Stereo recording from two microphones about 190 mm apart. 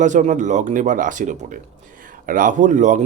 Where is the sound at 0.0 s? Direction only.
40° right (ahead or behind).